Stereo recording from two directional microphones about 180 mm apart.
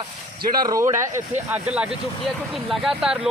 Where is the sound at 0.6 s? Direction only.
15° right (ahead or behind).